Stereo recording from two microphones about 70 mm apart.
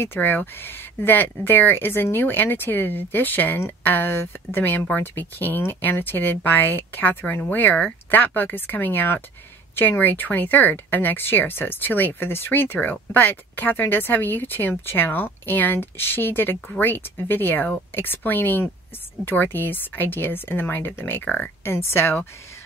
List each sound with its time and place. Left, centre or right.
0.0 s speech: left
21.6 s speech: left